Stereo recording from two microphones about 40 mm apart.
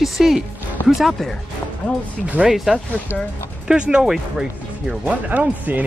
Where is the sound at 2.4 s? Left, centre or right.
Centre.